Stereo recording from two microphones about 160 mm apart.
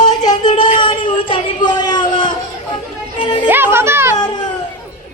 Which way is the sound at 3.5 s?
15° right (ahead or behind).